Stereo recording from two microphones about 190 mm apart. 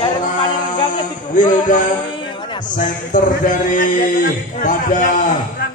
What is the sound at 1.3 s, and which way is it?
A man's voice, 40° left (ahead or behind).